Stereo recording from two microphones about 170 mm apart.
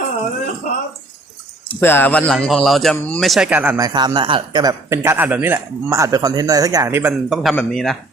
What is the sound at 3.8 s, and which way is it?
A man's voice, 25° right (ahead or behind).